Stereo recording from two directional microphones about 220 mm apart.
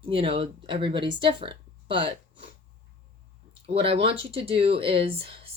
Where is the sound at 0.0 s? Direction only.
25° right (ahead or behind).